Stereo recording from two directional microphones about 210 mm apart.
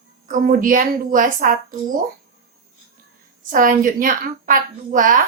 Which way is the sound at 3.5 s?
40° right (ahead or behind).